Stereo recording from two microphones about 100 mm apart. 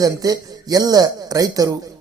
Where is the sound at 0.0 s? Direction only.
40° right (ahead or behind).